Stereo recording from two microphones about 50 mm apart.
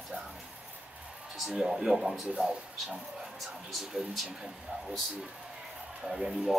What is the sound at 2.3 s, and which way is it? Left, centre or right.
Speech, centre.